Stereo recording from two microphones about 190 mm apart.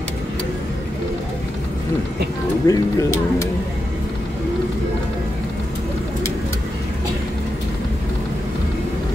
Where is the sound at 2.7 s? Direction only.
20° left (ahead or behind).